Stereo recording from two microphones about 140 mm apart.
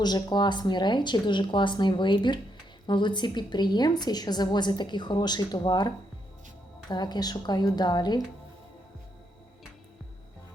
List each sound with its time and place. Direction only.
0.0 s a woman's voice: 30° left (ahead or behind)
6.9 s a woman's voice: 30° left (ahead or behind)